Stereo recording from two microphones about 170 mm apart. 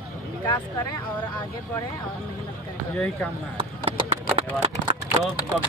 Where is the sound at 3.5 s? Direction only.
30° right (ahead or behind).